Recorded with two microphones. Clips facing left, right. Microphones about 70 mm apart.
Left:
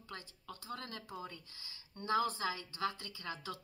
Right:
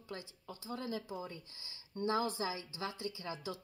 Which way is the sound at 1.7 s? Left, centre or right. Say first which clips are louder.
Even; right.